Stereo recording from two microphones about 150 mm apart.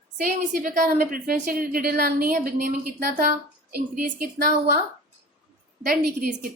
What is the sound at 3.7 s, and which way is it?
Speech, 80° right.